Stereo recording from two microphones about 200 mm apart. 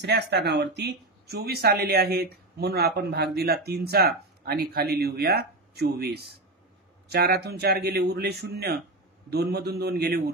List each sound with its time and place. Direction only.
0.0 s speech: 55° right (ahead or behind)